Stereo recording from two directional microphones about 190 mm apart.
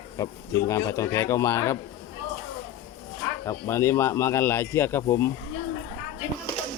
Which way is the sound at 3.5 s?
15° left (ahead or behind).